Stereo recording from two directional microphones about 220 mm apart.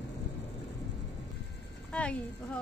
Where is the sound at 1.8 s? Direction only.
5° left (ahead or behind).